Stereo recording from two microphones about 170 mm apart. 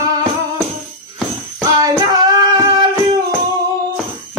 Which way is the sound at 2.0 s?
25° right (ahead or behind).